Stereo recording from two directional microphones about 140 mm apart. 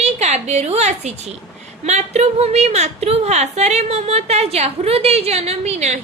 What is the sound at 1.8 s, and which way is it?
A woman's voice, 55° right (ahead or behind).